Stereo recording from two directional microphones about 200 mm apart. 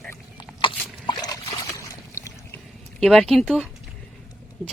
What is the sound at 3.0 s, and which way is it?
Speech, centre (ahead or behind).